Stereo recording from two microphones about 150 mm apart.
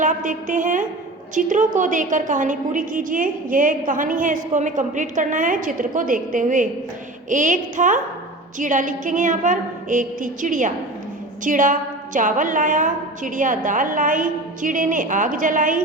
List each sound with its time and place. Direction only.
0.0 s a woman's voice: 60° right (ahead or behind)